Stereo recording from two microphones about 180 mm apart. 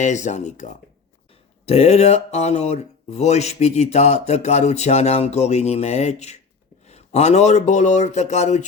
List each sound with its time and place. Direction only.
0.0 s speech: 40° left (ahead or behind)